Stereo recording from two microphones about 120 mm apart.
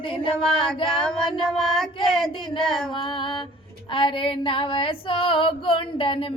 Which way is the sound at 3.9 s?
45° left (ahead or behind).